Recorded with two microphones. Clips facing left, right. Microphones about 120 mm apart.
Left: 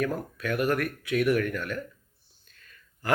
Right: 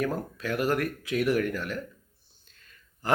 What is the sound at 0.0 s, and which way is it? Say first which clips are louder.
Speech: even; 30° right (ahead or behind).